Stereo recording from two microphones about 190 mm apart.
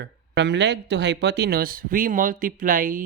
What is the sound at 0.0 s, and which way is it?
Speech, 65° right (ahead or behind).